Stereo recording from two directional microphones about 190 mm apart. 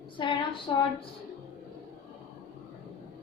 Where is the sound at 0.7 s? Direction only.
25° left (ahead or behind).